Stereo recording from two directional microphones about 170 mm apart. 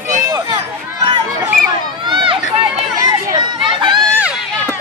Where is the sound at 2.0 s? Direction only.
30° right (ahead or behind).